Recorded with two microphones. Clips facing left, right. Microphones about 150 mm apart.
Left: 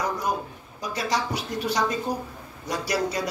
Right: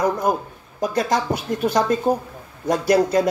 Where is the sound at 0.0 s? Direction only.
50° right (ahead or behind).